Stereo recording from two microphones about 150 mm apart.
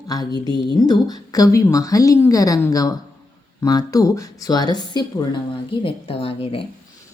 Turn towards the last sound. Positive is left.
turn(degrees=40)  # may be behind; listen again after turning